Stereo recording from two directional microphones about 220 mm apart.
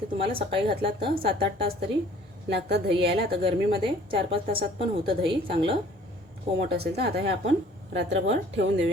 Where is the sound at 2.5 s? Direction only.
50° right (ahead or behind).